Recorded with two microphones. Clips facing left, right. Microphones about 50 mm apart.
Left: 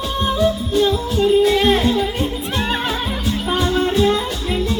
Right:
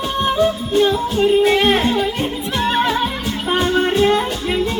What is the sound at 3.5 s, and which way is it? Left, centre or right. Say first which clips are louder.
Music: right 2 dB; right.